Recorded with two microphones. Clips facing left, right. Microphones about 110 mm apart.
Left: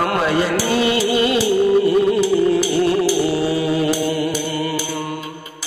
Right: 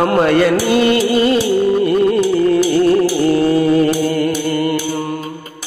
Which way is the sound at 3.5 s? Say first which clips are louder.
Right 6 dB; 50° right (ahead or behind).